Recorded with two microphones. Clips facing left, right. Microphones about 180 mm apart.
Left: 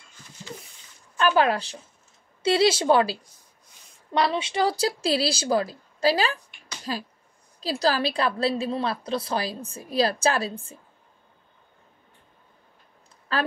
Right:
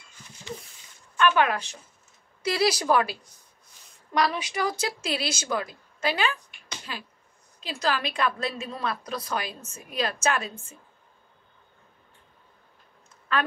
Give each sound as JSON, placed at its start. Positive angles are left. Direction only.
{"t": 1.1, "sound": "a woman's voice", "side_deg": 35}
{"t": 13.3, "sound": "a woman's voice", "side_deg": 35}